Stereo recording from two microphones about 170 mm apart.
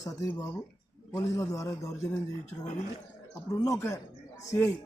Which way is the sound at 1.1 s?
20° left (ahead or behind).